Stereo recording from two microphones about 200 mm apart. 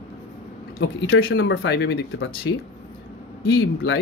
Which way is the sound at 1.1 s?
70° left (ahead or behind).